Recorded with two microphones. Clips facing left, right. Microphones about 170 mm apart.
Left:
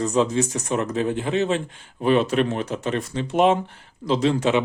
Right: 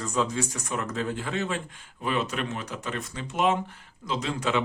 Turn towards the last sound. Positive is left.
turn(degrees=25)  # may be behind; listen again after turning